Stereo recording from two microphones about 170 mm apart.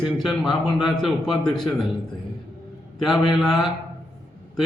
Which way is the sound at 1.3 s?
25° left (ahead or behind).